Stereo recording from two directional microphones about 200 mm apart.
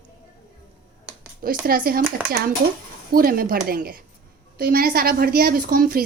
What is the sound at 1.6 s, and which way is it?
Speech, 45° right (ahead or behind).